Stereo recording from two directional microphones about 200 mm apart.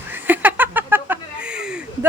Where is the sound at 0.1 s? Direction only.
10° right (ahead or behind).